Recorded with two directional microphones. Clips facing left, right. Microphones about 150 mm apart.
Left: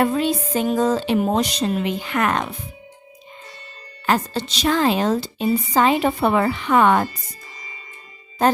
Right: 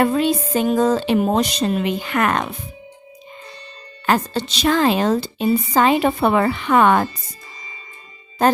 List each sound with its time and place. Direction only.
0.0 s a woman's voice: 65° right (ahead or behind)
4.0 s a woman's voice: 65° right (ahead or behind)